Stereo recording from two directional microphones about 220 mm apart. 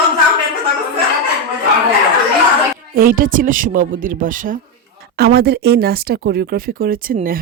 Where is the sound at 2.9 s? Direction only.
40° right (ahead or behind).